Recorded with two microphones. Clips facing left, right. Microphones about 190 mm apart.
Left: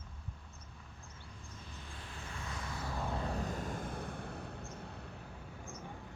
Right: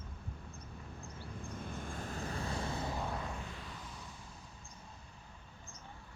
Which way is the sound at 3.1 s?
35° left (ahead or behind).